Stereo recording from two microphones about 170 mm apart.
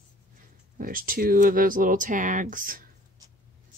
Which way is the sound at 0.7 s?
55° right (ahead or behind).